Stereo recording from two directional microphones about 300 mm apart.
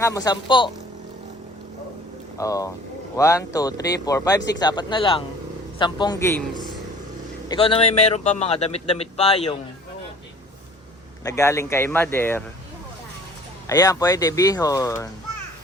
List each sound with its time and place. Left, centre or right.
0.0 s speech: centre
2.4 s a man's voice: centre
11.2 s speech: centre
13.7 s speech: centre